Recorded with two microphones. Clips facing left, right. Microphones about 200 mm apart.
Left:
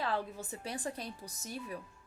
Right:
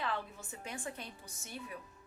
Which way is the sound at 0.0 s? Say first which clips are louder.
Left 4 dB; 35° left (ahead or behind).